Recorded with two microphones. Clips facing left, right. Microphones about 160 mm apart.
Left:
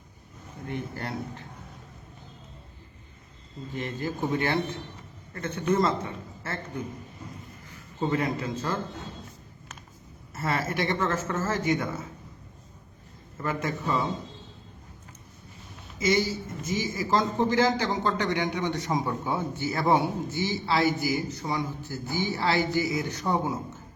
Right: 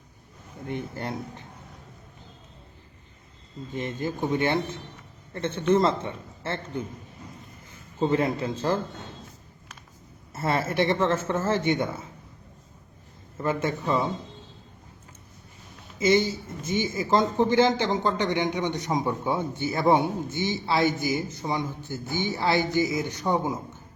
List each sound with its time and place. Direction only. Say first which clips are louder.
0.7 s speech: right 2 dB; 20° right (ahead or behind)
3.8 s a man's voice: right 2 dB; 20° right (ahead or behind)
10.3 s speech: right 4 dB; 30° right (ahead or behind)
13.4 s speech: right 3 dB; 25° right (ahead or behind)
16.0 s speech: right 3 dB; 30° right (ahead or behind)